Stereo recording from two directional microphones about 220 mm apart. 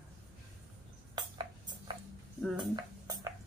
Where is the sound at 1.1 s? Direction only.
20° right (ahead or behind).